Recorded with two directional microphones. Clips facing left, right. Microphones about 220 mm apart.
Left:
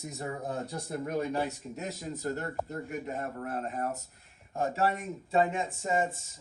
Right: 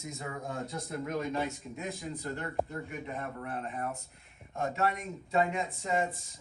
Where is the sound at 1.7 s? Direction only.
45° left (ahead or behind).